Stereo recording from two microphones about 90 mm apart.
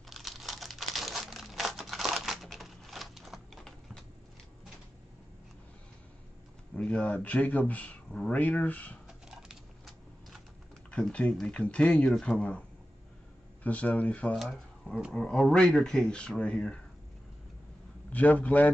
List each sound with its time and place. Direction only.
0.1 s crumpling: centre (ahead or behind)
6.7 s speech: 10° left (ahead or behind)
9.0 s typewriter: 5° right (ahead or behind)
10.9 s speech: 10° left (ahead or behind)
13.7 s speech: 15° left (ahead or behind)
14.3 s speech: centre (ahead or behind)
18.1 s speech: 15° left (ahead or behind)